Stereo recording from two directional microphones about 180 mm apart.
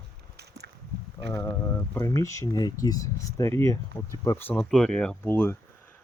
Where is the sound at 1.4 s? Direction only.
15° left (ahead or behind).